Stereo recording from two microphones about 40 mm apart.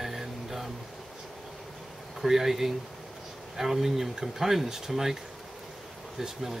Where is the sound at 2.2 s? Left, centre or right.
Centre.